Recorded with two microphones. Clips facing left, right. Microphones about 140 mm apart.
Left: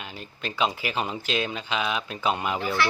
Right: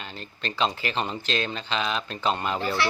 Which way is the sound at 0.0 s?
10° left (ahead or behind).